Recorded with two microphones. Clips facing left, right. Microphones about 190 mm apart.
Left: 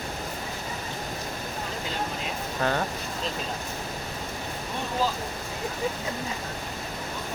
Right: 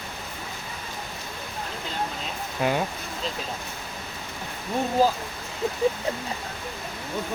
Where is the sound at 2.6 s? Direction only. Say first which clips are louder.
Right 2 dB; 10° right (ahead or behind).